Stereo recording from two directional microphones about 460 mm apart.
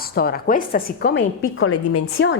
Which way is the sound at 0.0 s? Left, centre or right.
Centre.